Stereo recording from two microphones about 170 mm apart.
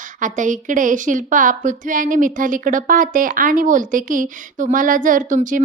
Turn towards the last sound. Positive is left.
turn(degrees=-50)  # may be behind; listen again after turning